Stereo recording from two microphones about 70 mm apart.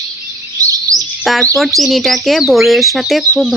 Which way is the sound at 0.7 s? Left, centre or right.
Right.